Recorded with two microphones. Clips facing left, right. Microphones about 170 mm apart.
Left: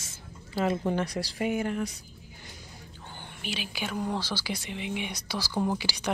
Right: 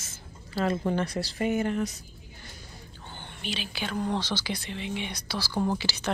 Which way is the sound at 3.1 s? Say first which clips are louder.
Right 1 dB; 10° left (ahead or behind).